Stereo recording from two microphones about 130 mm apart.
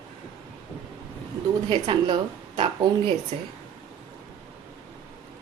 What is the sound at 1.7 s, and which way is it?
A woman's voice, 40° right (ahead or behind).